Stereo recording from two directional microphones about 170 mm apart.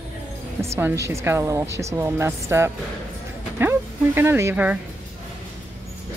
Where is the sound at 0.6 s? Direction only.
15° right (ahead or behind).